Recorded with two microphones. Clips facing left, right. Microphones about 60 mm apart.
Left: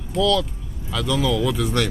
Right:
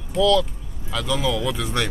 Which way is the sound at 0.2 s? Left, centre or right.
Centre.